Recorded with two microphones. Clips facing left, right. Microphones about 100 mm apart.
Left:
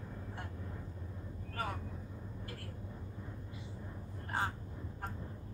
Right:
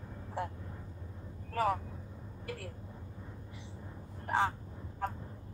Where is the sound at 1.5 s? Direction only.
80° right.